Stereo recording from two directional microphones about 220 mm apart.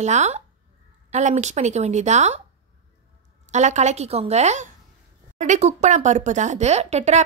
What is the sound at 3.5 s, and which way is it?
Speech, 30° right (ahead or behind).